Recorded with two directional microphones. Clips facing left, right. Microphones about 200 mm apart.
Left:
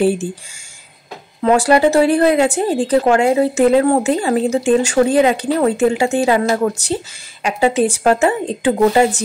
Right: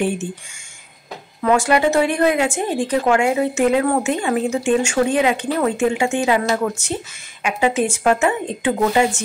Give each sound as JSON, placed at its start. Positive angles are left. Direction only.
{"t": 0.0, "sound": "a woman's voice", "side_deg": 35}
{"t": 1.4, "sound": "a woman's voice", "side_deg": 35}